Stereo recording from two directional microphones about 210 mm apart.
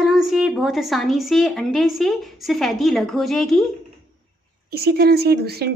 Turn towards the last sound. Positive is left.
turn(degrees=-50)  # may be behind; listen again after turning